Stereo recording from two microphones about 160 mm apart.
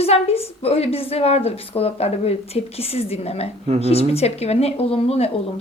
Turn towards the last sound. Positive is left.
turn(degrees=40)  # may be behind; listen again after turning